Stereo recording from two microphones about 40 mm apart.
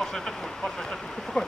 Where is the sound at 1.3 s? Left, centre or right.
Centre.